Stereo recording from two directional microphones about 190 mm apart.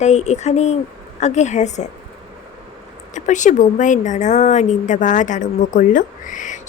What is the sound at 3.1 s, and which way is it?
Speech, 40° left (ahead or behind).